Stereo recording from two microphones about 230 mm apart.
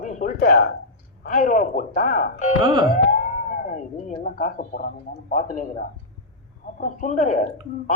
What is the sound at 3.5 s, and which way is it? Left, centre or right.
Speech, left.